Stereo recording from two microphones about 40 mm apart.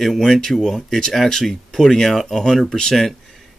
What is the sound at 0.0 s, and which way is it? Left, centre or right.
Speech, centre.